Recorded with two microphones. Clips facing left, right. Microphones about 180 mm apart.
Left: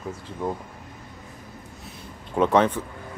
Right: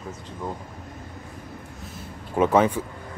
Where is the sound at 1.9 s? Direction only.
5° right (ahead or behind).